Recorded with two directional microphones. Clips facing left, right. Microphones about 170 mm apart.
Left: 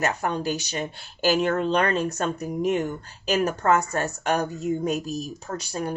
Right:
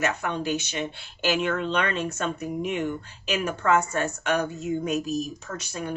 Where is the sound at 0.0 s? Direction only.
35° left (ahead or behind).